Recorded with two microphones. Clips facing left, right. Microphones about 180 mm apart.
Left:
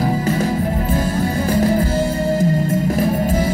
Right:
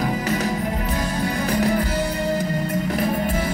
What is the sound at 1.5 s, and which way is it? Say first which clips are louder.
Music: left 4 dB; 25° left (ahead or behind).